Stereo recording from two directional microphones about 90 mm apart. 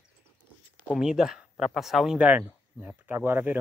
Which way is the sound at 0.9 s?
5° right (ahead or behind).